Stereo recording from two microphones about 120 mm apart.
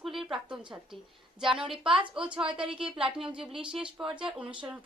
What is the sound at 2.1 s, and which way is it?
A woman's voice, 5° right (ahead or behind).